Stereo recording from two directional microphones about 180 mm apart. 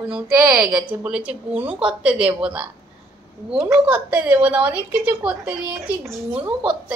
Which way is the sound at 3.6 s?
10° right (ahead or behind).